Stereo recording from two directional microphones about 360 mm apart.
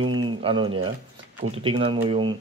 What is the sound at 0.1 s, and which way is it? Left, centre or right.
Speech, centre.